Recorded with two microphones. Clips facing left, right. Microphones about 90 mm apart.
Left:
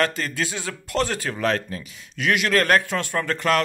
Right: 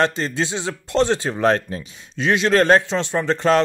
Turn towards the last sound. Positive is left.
turn(degrees=-25)  # may be behind; listen again after turning